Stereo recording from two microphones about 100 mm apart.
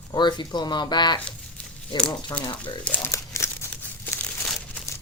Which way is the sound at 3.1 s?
30° left (ahead or behind).